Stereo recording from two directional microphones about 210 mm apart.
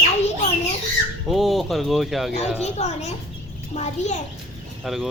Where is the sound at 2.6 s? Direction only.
30° left (ahead or behind).